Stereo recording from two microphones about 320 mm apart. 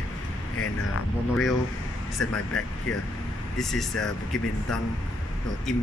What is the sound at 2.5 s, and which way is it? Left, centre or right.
Speech, centre.